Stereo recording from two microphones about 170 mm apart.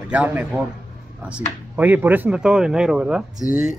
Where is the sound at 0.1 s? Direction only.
10° right (ahead or behind).